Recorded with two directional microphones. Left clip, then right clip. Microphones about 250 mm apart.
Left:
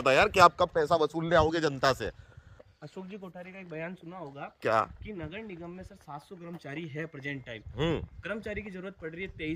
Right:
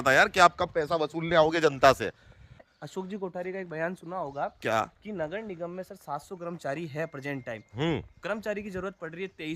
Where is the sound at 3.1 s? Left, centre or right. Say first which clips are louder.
Right 10 dB; right.